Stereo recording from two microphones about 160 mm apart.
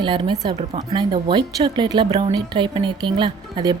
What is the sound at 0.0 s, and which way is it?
A woman's voice, 30° right (ahead or behind).